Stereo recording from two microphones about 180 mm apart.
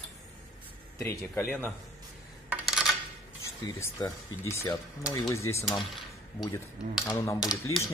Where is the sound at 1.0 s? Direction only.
15° left (ahead or behind).